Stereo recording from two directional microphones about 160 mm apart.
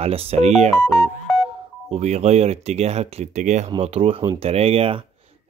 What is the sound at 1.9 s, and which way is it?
Speech, 45° right (ahead or behind).